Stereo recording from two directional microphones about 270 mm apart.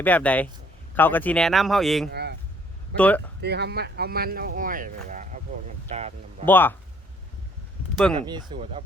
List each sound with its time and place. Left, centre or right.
0.0 s speech: centre
3.4 s speech: right
6.4 s speech: centre
7.9 s speech: centre
8.3 s speech: centre